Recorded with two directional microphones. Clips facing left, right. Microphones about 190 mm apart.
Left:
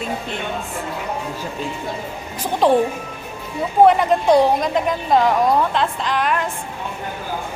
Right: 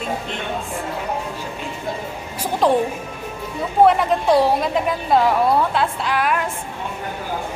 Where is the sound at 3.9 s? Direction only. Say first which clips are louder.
Left 2 dB; centre (ahead or behind).